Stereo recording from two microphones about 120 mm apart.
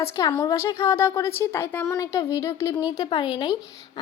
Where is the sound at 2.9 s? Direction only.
40° left (ahead or behind).